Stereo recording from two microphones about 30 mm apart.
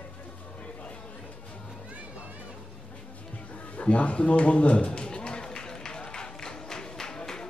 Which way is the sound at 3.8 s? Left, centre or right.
Left.